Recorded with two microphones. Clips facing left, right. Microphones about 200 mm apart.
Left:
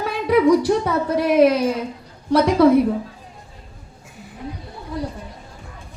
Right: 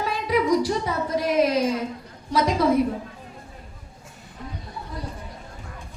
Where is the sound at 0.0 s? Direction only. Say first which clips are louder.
Left 7 dB; 60° left (ahead or behind).